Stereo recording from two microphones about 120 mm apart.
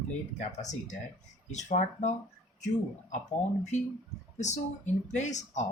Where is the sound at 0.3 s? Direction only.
80° left.